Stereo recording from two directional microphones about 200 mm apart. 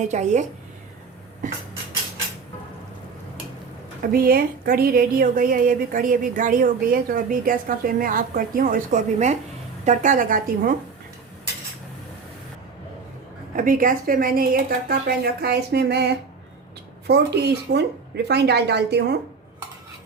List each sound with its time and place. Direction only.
0.0 s a woman's voice: 35° right (ahead or behind)
4.1 s a woman's voice: 50° right (ahead or behind)
13.6 s a woman's voice: 45° right (ahead or behind)